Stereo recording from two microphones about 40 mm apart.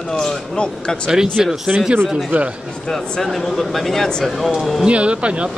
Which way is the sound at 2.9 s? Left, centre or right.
Centre.